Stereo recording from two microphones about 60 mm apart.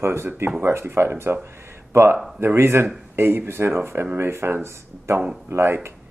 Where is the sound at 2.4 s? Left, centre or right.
Right.